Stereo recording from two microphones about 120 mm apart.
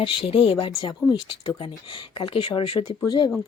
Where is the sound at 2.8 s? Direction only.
35° left (ahead or behind).